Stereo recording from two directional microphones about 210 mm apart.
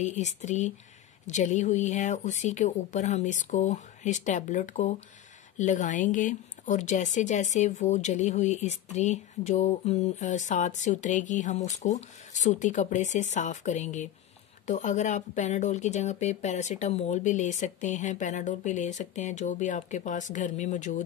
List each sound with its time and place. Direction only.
0.0 s speech: 35° left (ahead or behind)